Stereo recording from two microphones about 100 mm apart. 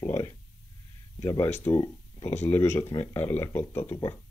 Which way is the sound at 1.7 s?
40° left (ahead or behind).